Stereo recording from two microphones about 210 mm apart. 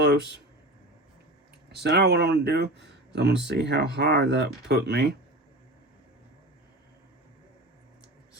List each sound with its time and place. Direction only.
0.0 s speech: 55° right (ahead or behind)
1.7 s speech: 50° right (ahead or behind)